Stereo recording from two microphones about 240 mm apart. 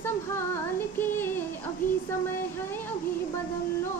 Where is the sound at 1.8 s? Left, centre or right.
Left.